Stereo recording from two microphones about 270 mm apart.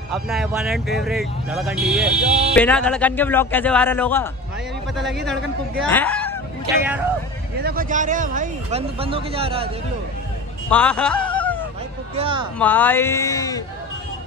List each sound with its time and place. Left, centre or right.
0.1 s speech: centre
6.6 s speech: centre
7.6 s speech: right
10.7 s music: centre
12.2 s speech: centre
12.5 s speech: centre